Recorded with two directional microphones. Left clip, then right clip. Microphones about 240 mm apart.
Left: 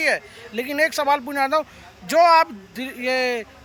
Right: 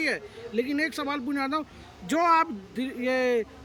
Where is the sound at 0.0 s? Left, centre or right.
Centre.